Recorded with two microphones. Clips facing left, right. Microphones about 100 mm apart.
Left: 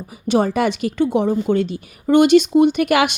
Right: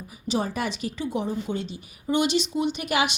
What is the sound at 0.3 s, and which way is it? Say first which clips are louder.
A woman's voice: left 10 dB; 75° left (ahead or behind).